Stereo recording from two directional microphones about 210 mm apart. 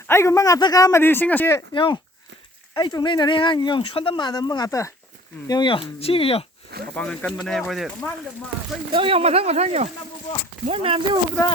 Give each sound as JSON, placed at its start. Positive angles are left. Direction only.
{"t": 0.1, "sound": "a man's voice", "side_deg": 15}
{"t": 1.7, "sound": "speech", "side_deg": 25}
{"t": 6.9, "sound": "speech", "side_deg": 5}
{"t": 8.9, "sound": "speech", "side_deg": -25}